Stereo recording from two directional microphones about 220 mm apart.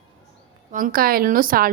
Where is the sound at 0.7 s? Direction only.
40° right (ahead or behind).